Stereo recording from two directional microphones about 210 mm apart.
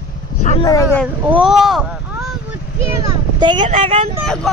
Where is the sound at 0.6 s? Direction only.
15° left (ahead or behind).